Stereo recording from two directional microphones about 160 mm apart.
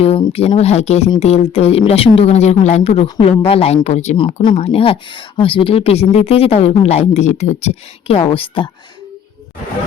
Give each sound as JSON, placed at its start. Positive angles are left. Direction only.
{"t": 0.0, "sound": "speech", "side_deg": 35}